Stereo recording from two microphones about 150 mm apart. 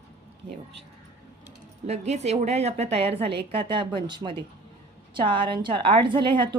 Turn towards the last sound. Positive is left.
turn(degrees=-30)  # may be behind; listen again after turning